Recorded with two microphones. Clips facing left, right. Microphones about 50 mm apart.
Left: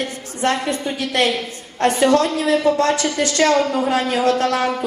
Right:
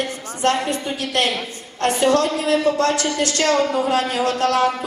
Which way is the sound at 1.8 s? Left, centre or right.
Left.